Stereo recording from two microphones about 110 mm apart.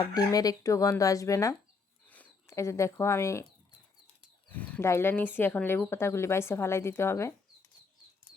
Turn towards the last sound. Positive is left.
turn(degrees=20)  # may be behind; listen again after turning